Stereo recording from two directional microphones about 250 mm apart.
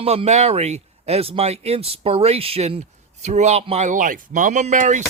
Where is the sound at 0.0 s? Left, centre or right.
Right.